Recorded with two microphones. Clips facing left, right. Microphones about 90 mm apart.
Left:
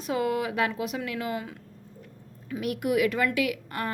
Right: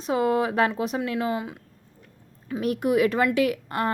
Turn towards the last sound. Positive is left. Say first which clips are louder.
# right 5 dB
turn(degrees=-35)  # may be behind; listen again after turning